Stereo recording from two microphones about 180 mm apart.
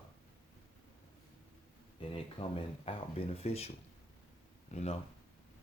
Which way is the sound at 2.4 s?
25° left (ahead or behind).